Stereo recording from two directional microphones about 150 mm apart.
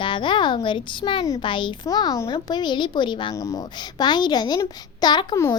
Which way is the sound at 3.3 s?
20° left (ahead or behind).